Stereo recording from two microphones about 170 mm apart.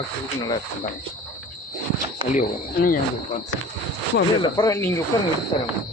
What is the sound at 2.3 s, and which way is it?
Speech, 50° left (ahead or behind).